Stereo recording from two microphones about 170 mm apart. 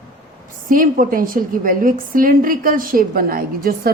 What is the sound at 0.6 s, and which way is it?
Speech, 50° right (ahead or behind).